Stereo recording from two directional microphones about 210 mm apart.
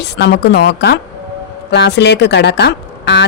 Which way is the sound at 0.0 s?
55° left (ahead or behind).